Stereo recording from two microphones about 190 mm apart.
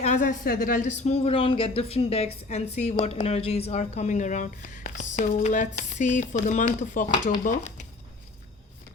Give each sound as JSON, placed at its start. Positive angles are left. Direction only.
{"t": 0.0, "sound": "a woman's voice", "side_deg": 40}